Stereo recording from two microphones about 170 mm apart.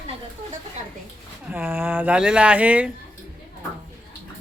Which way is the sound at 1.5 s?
10° right (ahead or behind).